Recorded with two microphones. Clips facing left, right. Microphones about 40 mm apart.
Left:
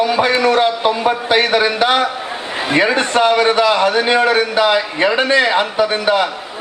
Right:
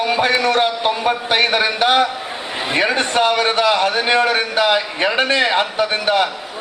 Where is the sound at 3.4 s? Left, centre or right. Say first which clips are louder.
Left 3 dB; centre.